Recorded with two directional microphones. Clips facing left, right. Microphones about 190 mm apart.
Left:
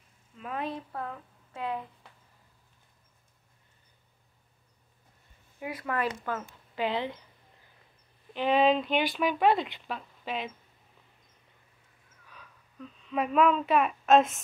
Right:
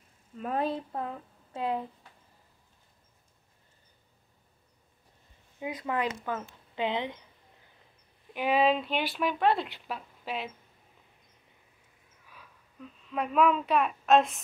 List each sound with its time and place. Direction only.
0.4 s a woman's voice: 35° right (ahead or behind)
0.9 s speech: 25° right (ahead or behind)
5.6 s speech: 20° right (ahead or behind)
8.3 s speech: 10° right (ahead or behind)
13.1 s speech: centre (ahead or behind)